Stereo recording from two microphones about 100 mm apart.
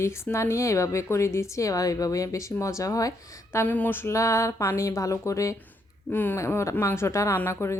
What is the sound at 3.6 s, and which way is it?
Speech, 15° left (ahead or behind).